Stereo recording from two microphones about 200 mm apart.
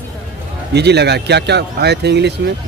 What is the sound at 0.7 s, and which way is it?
A man's voice, 55° right (ahead or behind).